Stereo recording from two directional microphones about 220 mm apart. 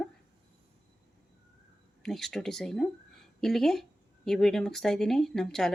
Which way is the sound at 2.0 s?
Centre (ahead or behind).